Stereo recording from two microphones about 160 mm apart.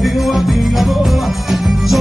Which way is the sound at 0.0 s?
Centre (ahead or behind).